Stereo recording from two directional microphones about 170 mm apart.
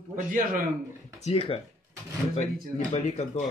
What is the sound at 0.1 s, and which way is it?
Speech, 55° right (ahead or behind).